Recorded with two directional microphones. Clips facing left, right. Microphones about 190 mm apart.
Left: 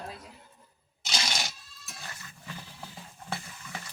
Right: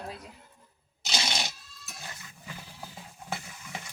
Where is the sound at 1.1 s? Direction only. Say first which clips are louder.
Right 1 dB; 20° right (ahead or behind).